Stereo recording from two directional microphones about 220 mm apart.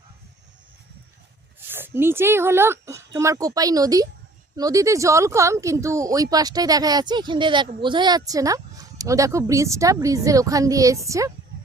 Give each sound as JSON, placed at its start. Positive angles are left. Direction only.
{"t": 1.5, "sound": "speech", "side_deg": -10}